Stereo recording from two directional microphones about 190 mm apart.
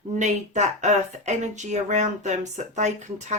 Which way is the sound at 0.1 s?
40° right (ahead or behind).